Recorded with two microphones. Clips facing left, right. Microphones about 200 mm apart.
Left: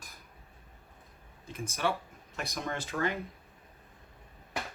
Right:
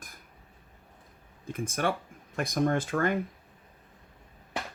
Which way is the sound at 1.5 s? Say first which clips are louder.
Right 3 dB; 50° right (ahead or behind).